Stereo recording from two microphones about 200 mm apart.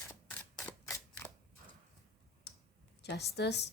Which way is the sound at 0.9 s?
15° left (ahead or behind).